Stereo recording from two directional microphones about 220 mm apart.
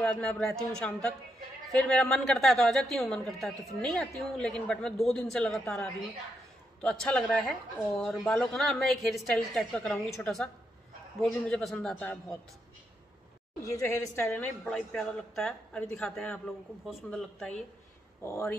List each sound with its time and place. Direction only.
0.0 s a woman's voice: 5° left (ahead or behind)
13.7 s a woman's voice: 10° left (ahead or behind)